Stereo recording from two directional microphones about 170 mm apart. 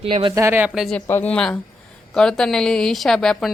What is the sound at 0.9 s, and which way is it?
A woman's voice, 10° left (ahead or behind).